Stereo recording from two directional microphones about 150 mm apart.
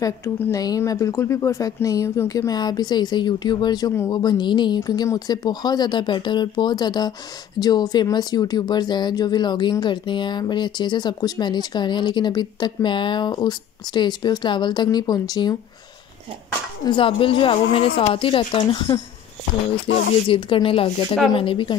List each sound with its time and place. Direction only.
0.0 s speech: 20° left (ahead or behind)
16.8 s a woman's voice: 35° left (ahead or behind)
20.2 s a woman's voice: 35° left (ahead or behind)